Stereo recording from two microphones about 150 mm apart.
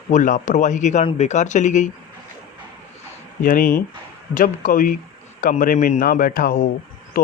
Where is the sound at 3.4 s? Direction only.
65° left (ahead or behind).